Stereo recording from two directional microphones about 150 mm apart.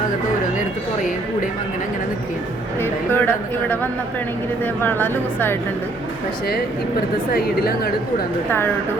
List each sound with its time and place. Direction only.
2.8 s a sound: 15° left (ahead or behind)
4.6 s a woman's voice: 10° left (ahead or behind)
7.3 s a woman's voice: 90° left
8.4 s a woman's voice: 15° left (ahead or behind)